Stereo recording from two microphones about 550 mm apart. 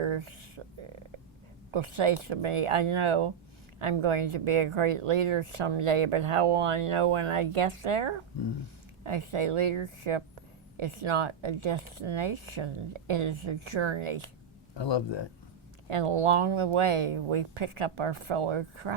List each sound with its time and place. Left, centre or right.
0.0 s a sound: right
1.7 s speech: right
14.8 s speech: left
15.9 s speech: right